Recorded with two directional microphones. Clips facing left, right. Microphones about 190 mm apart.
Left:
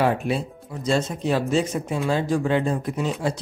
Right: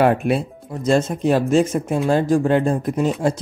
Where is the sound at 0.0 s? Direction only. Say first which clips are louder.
Right 5 dB; 60° right (ahead or behind).